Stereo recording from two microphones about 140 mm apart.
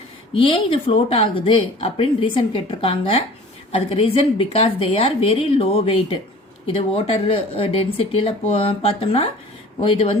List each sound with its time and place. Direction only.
0.3 s speech: 40° left (ahead or behind)